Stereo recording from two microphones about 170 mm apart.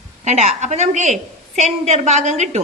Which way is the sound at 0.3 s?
40° right (ahead or behind).